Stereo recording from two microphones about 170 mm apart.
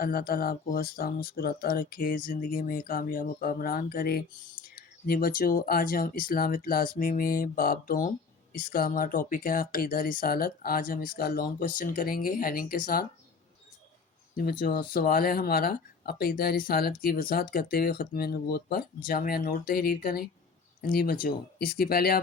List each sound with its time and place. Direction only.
0.0 s speech: 60° left (ahead or behind)
14.9 s speech: 60° left (ahead or behind)